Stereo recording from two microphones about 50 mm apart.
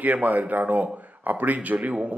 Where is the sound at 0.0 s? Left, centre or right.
Right.